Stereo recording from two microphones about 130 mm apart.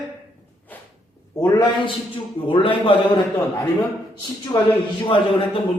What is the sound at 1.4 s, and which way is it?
A man's voice, 35° left (ahead or behind).